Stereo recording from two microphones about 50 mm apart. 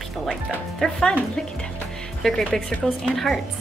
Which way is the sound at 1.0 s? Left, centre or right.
Centre.